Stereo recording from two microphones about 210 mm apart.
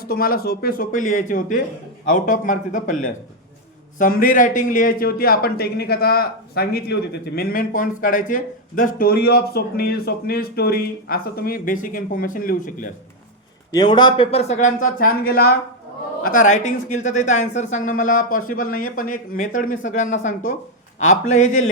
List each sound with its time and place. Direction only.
0.0 s a man's voice: 45° left (ahead or behind)
13.7 s speech: 20° left (ahead or behind)